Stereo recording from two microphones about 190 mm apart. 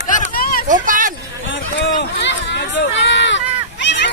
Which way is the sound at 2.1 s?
65° left (ahead or behind).